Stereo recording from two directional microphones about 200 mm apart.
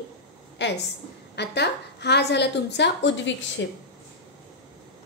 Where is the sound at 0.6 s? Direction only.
65° left (ahead or behind).